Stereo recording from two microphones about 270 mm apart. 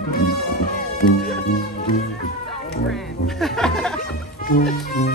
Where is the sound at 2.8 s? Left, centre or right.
Centre.